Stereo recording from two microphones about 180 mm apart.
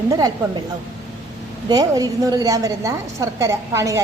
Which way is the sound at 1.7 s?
20° right (ahead or behind).